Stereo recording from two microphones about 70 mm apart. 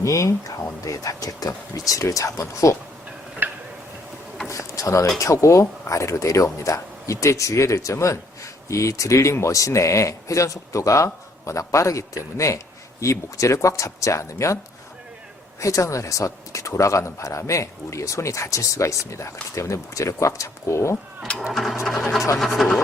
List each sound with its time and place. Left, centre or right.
0.0 s speech: left
3.4 s tick-tock: right
4.4 s a sound: left
5.1 s speech: left
15.6 s speech: left
21.5 s speech: centre